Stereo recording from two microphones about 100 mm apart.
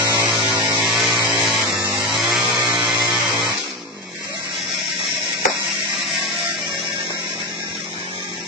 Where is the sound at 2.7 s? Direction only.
5° right (ahead or behind).